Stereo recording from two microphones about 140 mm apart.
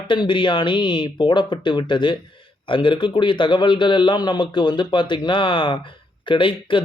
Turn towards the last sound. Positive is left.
turn(degrees=35)  # may be behind; listen again after turning